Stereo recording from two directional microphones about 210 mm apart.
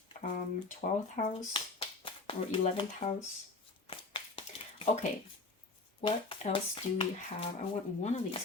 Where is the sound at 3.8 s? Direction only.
25° left (ahead or behind).